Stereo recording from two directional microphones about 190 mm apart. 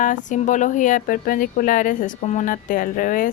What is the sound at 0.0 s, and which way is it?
Speech, 40° left (ahead or behind).